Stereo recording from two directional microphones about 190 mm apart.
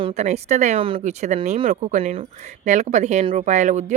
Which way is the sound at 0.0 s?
35° right (ahead or behind).